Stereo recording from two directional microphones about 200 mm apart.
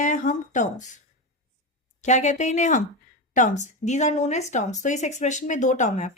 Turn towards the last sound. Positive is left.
turn(degrees=35)  # may be behind; listen again after turning